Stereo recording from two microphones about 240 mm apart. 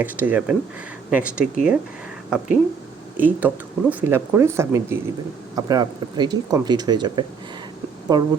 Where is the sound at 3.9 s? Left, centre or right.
Centre.